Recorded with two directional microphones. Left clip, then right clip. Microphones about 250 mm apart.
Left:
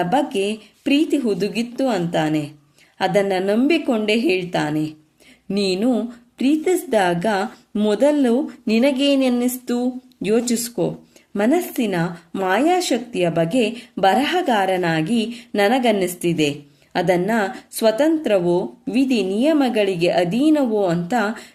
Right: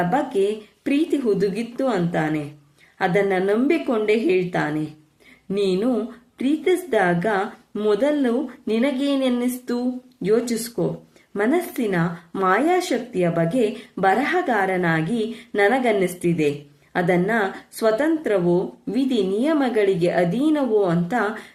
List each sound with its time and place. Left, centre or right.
0.1 s speech: left